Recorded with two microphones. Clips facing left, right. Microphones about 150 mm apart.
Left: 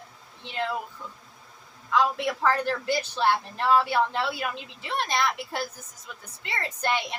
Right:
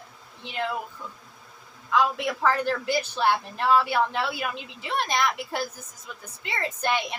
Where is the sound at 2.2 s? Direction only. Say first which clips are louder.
Even; 15° right (ahead or behind).